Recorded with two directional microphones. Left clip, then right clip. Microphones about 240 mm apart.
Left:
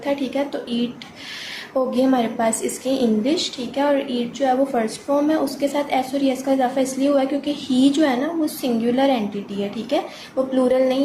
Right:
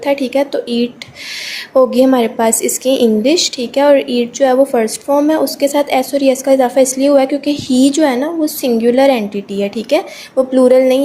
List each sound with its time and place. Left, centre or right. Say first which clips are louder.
0.0 s a woman's voice: right 9 dB; right